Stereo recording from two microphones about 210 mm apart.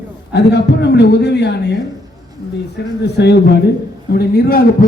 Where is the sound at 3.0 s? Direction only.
50° left (ahead or behind).